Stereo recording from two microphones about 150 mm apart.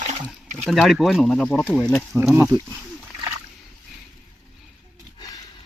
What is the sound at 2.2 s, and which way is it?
Speech, 15° right (ahead or behind).